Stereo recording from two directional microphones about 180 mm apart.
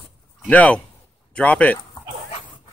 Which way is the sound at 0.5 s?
5° left (ahead or behind).